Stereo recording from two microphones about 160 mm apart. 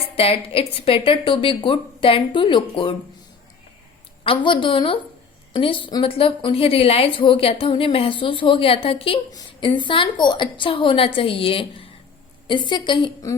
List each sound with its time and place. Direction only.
0.2 s a woman's voice: 35° left (ahead or behind)
4.2 s a woman's voice: 30° left (ahead or behind)